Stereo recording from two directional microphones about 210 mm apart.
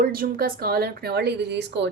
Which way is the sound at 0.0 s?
45° right (ahead or behind).